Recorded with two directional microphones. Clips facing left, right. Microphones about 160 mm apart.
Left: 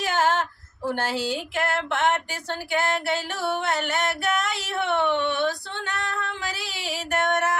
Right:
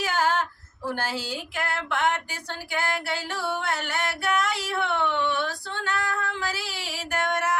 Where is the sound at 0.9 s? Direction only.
25° left (ahead or behind).